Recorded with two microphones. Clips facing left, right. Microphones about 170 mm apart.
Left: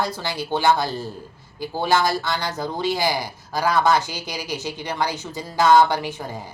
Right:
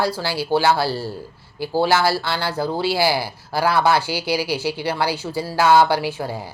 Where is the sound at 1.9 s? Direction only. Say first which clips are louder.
Right 1 dB; 5° right (ahead or behind).